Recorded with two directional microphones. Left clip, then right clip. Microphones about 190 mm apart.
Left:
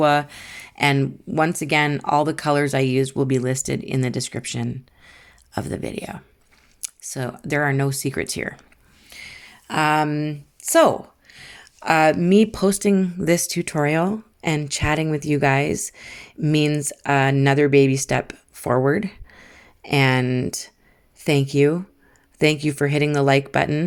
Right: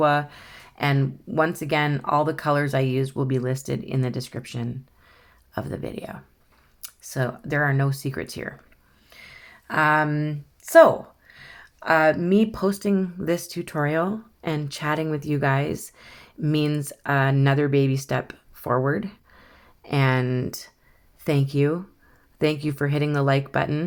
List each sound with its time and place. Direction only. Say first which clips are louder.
0.0 s speech: left 3 dB; 35° left (ahead or behind)